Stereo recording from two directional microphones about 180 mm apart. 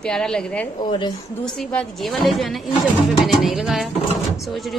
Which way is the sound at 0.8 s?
25° left (ahead or behind).